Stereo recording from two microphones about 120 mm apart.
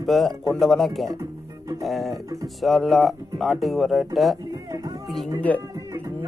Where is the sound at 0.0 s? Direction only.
Centre (ahead or behind).